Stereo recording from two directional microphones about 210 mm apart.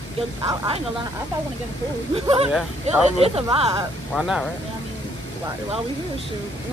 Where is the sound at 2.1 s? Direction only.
25° right (ahead or behind).